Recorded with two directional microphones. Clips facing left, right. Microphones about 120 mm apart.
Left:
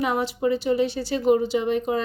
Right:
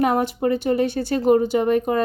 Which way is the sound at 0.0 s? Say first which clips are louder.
Right 4 dB; 50° right (ahead or behind).